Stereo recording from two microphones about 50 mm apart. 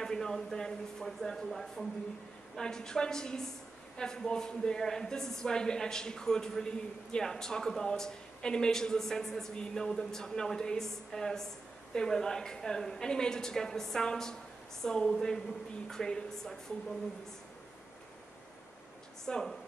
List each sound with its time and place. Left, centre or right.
0.0 s a woman's voice: centre
19.2 s speech: centre